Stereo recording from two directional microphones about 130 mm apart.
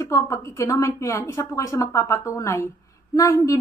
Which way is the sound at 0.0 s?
25° left (ahead or behind).